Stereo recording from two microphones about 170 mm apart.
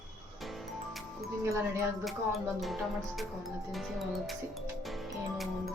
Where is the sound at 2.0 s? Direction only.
Centre (ahead or behind).